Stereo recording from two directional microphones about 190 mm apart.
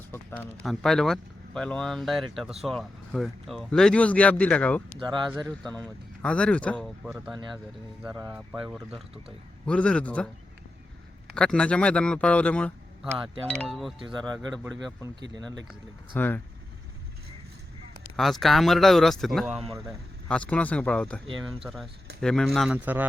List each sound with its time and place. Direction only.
0.1 s speech: 10° left (ahead or behind)
0.6 s speech: centre (ahead or behind)
4.9 s speech: 25° right (ahead or behind)
5.7 s speech: 5° left (ahead or behind)
8.0 s speech: 10° right (ahead or behind)
8.6 s speech: centre (ahead or behind)
11.3 s speech: 5° left (ahead or behind)
15.4 s speech: 20° right (ahead or behind)
16.1 s speech: 10° left (ahead or behind)
18.2 s speech: centre (ahead or behind)